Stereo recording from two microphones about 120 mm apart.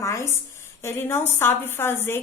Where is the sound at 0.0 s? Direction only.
25° left (ahead or behind).